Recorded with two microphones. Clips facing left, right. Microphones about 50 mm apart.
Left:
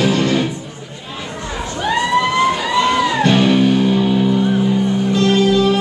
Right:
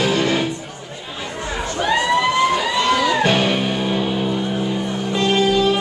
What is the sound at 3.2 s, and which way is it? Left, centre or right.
Music, centre.